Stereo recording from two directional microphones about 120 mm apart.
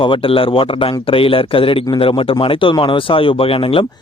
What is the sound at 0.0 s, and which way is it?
Speech, 45° left (ahead or behind).